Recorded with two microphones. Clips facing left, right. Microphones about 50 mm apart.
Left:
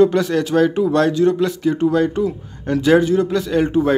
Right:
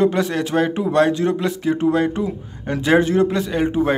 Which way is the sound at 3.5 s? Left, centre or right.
Centre.